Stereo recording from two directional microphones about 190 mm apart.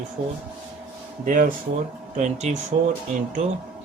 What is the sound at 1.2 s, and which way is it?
Speech, 45° right (ahead or behind).